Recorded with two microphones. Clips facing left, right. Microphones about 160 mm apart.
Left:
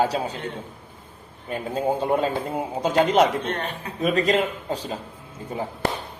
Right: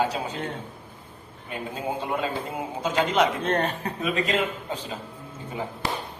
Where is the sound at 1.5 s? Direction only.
40° left (ahead or behind).